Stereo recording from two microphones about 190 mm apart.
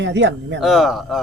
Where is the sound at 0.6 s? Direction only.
Centre (ahead or behind).